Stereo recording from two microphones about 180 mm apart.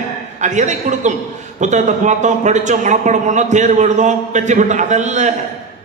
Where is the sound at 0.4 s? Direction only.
40° right (ahead or behind).